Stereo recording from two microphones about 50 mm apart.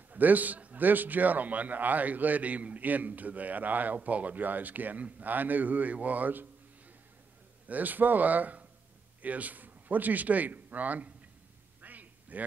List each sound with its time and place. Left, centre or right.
0.1 s a man's voice: right
7.6 s a man's voice: right
11.8 s a sound: right